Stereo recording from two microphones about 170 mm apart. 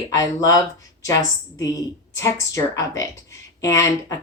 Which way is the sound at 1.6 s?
20° left (ahead or behind).